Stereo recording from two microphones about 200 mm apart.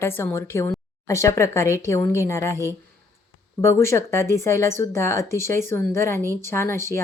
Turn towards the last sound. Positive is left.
turn(degrees=10)  # may be behind; listen again after turning